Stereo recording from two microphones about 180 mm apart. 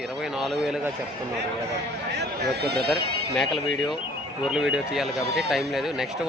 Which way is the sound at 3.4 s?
Centre (ahead or behind).